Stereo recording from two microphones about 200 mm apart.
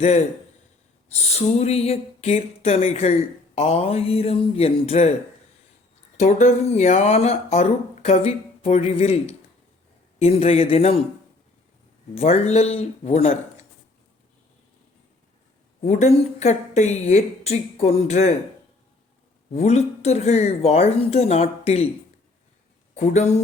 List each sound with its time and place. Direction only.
0.0 s speech: 35° left (ahead or behind)
6.1 s speech: 35° left (ahead or behind)
12.1 s speech: 30° left (ahead or behind)
15.8 s speech: 35° left (ahead or behind)
19.5 s speech: 35° left (ahead or behind)
23.0 s speech: 35° left (ahead or behind)